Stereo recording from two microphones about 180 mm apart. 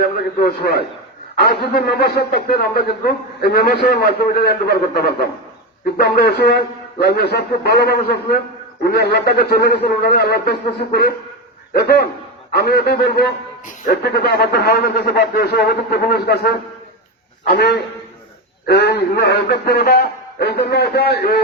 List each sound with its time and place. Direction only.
0.4 s a man's voice: 65° left (ahead or behind)